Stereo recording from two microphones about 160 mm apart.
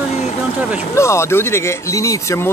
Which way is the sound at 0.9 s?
15° left (ahead or behind).